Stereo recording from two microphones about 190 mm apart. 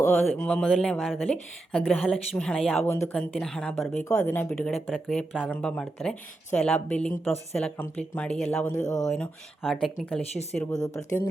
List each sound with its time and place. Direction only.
0.3 s speech: 5° left (ahead or behind)
2.8 s speech: 10° left (ahead or behind)
10.2 s speech: 35° left (ahead or behind)
10.6 s speech: 20° left (ahead or behind)